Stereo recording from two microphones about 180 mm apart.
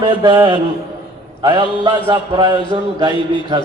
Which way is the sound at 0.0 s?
25° right (ahead or behind).